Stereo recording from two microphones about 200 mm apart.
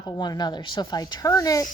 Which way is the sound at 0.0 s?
20° left (ahead or behind).